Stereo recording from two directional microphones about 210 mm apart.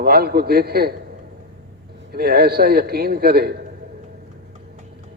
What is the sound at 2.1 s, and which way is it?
A man's voice, 45° right (ahead or behind).